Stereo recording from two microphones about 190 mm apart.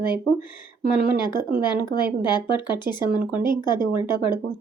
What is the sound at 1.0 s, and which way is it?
Speech, 25° left (ahead or behind).